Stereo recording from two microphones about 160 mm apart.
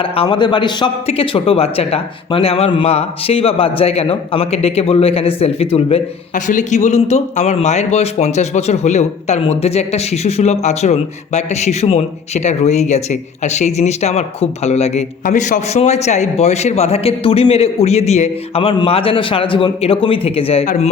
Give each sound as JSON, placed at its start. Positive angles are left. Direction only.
{"t": 0.0, "sound": "speech", "side_deg": 30}
{"t": 6.5, "sound": "a man's voice", "side_deg": 50}